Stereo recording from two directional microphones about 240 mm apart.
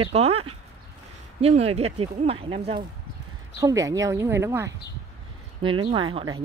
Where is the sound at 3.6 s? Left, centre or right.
Centre.